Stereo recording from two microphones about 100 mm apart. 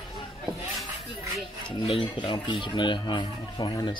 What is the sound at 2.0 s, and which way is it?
Speech, 50° left (ahead or behind).